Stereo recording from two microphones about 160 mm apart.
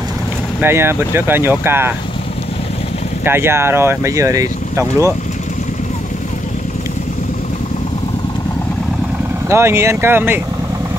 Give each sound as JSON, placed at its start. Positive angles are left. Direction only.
{"t": 0.6, "sound": "speech", "side_deg": -15}
{"t": 3.3, "sound": "speech", "side_deg": -15}
{"t": 9.5, "sound": "speech", "side_deg": -15}